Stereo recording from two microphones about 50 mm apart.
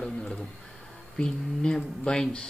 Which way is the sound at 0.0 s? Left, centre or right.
Centre.